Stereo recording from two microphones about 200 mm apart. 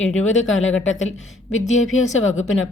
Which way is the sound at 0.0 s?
80° left.